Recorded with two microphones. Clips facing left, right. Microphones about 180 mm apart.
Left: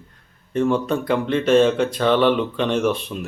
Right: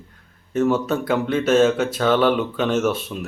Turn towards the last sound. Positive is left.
turn(degrees=0)  # may be behind; listen again after turning